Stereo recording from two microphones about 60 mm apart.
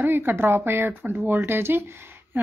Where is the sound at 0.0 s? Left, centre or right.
Right.